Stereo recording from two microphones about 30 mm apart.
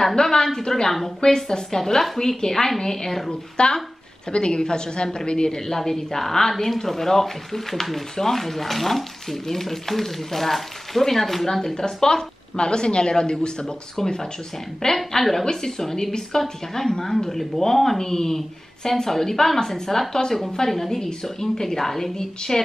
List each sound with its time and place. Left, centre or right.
0.1 s a woman's voice: left
5.7 s speech: centre
11.6 s a woman's voice: left
14.0 s a woman's voice: centre
15.1 s speech: centre
21.2 s speech: centre